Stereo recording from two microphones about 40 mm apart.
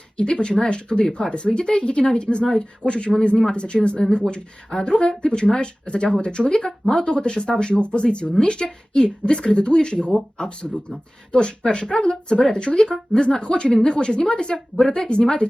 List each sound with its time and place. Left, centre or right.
0.2 s a woman's voice: left